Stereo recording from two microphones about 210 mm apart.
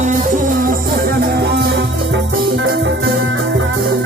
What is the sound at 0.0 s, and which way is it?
Music, 35° right (ahead or behind).